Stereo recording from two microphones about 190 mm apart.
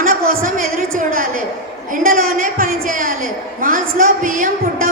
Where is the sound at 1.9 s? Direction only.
50° right (ahead or behind).